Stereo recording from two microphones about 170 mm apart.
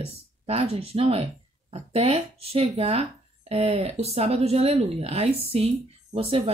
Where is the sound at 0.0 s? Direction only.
35° right (ahead or behind).